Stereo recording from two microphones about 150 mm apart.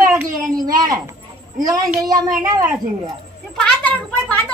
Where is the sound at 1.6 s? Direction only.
25° right (ahead or behind).